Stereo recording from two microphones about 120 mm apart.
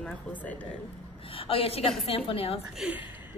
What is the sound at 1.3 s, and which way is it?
A woman's voice, 50° left (ahead or behind).